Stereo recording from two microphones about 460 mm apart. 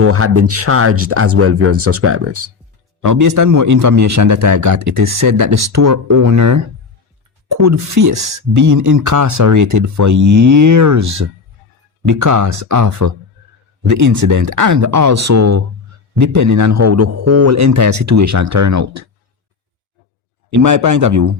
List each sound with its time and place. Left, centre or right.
0.0 s speech: right
3.0 s speech: right
20.5 s speech: right